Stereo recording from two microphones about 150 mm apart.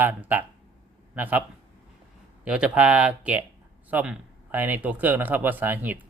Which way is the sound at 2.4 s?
5° right (ahead or behind).